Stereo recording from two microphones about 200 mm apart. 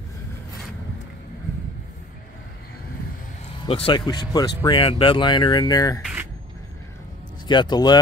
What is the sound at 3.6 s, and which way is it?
Speech, 25° left (ahead or behind).